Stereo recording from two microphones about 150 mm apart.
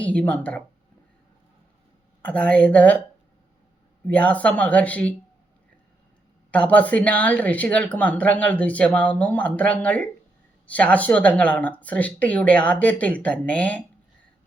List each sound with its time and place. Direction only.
0.0 s speech: 10° left (ahead or behind)
2.2 s speech: 10° left (ahead or behind)
4.0 s speech: 10° left (ahead or behind)
6.5 s speech: 10° left (ahead or behind)